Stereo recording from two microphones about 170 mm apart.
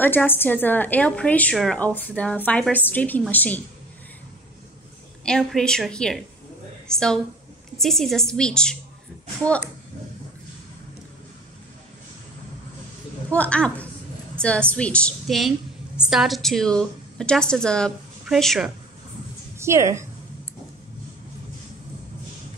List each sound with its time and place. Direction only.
0.0 s a woman's voice: 10° left (ahead or behind)
5.2 s a woman's voice: 5° left (ahead or behind)
13.3 s a woman's voice: 5° left (ahead or behind)
19.6 s a woman's voice: 15° right (ahead or behind)